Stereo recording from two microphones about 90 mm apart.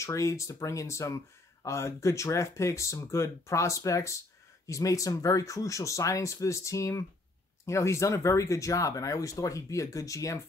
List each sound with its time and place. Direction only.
0.0 s speech: 35° left (ahead or behind)